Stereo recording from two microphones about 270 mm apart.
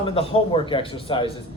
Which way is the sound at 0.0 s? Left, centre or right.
Centre.